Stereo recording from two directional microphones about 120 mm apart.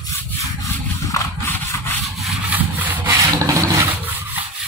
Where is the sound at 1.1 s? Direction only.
20° left (ahead or behind).